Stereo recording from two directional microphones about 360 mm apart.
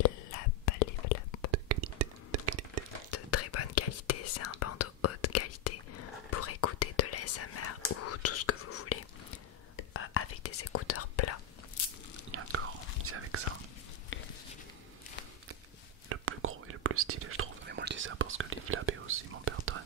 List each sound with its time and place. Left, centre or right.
0.0 s whispering: left
1.5 s a sound: right
3.1 s whispering: left
12.3 s whispering: right
14.1 s a sound: left
16.1 s whispering: right